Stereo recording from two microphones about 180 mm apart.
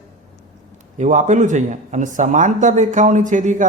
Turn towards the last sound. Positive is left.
turn(degrees=-45)  # may be behind; listen again after turning